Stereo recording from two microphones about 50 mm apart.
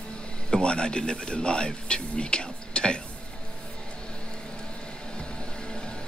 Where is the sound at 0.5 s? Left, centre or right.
Centre.